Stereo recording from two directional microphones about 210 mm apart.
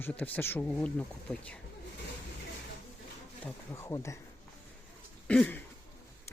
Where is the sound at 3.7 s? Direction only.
15° left (ahead or behind).